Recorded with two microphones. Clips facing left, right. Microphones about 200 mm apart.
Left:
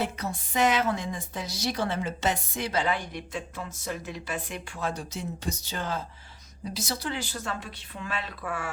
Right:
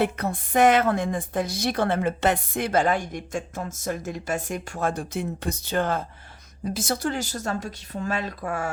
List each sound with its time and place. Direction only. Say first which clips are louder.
0.0 s a woman's voice: right 6 dB; 55° right (ahead or behind)